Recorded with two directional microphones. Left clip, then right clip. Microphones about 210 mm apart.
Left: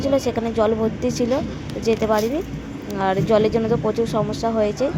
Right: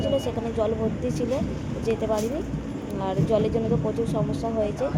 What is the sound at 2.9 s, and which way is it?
Speech, 20° left (ahead or behind).